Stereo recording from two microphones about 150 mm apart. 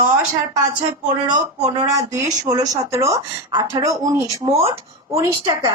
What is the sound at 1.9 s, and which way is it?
A woman's voice, 20° right (ahead or behind).